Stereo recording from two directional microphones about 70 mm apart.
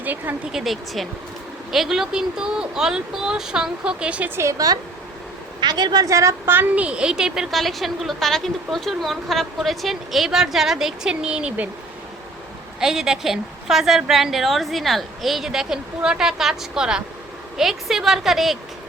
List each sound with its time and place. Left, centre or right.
0.0 s speech: right
0.5 s a woman's voice: centre
4.4 s a woman's voice: right
5.5 s a woman's voice: right
6.1 s a woman's voice: right
6.7 s a woman's voice: centre
12.8 s a woman's voice: centre